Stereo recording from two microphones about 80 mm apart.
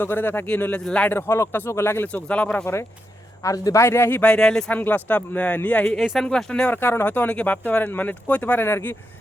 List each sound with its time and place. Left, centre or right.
0.0 s speech: left
1.1 s speech: left
2.2 s speech: centre
3.4 s speech: left
3.8 s speech: left
4.2 s speech: centre
4.7 s speech: left
6.0 s speech: centre
6.2 s speech: centre
6.7 s speech: left